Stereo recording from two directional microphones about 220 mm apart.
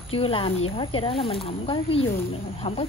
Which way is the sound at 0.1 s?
25° left (ahead or behind).